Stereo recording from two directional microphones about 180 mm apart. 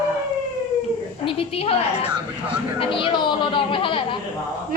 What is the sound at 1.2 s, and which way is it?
A woman's voice, 30° left (ahead or behind).